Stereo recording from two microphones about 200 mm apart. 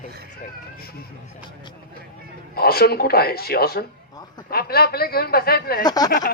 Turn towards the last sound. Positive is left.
turn(degrees=20)  # may be behind; listen again after turning